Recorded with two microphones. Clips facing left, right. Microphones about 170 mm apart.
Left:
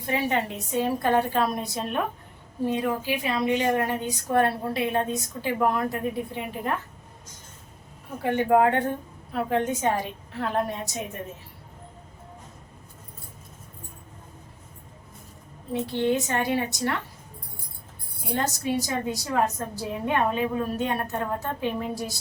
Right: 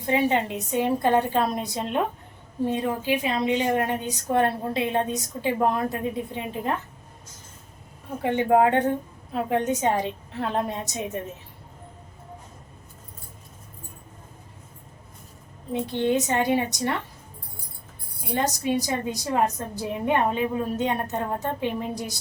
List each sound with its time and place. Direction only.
0.0 s a woman's voice: 20° right (ahead or behind)
8.2 s a woman's voice: 20° right (ahead or behind)
15.7 s a woman's voice: 20° right (ahead or behind)
18.3 s a woman's voice: 15° right (ahead or behind)